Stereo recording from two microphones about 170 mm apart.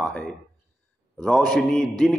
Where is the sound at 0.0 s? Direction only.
5° left (ahead or behind).